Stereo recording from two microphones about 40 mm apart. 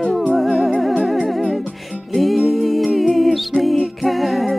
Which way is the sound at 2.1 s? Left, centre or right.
Centre.